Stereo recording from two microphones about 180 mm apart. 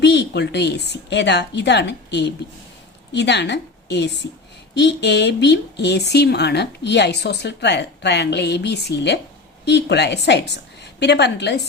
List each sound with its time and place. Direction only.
0.0 s a woman's voice: 70° left (ahead or behind)